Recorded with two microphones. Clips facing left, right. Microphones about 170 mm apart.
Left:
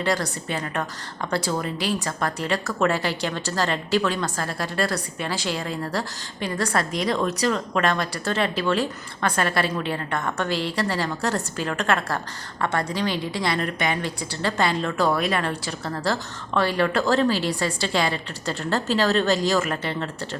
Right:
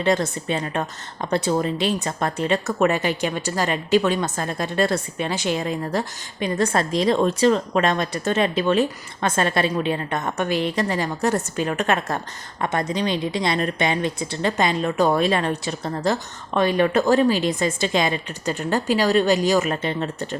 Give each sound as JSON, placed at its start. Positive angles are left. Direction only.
{"t": 0.0, "sound": "a woman's voice", "side_deg": -20}